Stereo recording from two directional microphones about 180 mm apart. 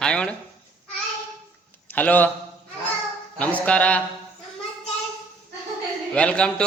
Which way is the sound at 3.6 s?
5° left (ahead or behind).